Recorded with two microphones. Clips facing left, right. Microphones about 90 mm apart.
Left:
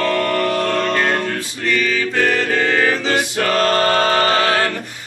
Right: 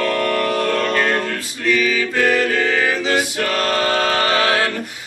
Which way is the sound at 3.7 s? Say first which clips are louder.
Left 3 dB; 45° left (ahead or behind).